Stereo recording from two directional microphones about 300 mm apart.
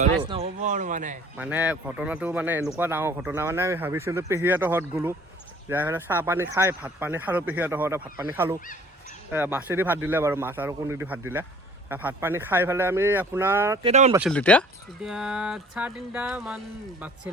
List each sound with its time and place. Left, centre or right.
0.0 s speech: centre
1.4 s speech: centre
13.8 s speech: right
14.1 s a sound: centre